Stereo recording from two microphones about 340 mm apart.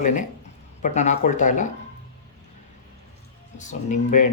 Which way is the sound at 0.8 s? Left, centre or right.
Left.